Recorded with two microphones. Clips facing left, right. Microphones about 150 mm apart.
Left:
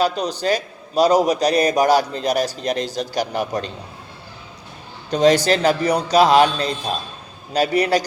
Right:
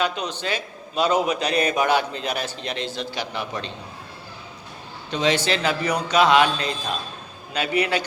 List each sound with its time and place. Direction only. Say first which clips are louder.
0.0 s a man's voice: left 6 dB; 35° left (ahead or behind)
5.1 s a man's voice: left 7 dB; 40° left (ahead or behind)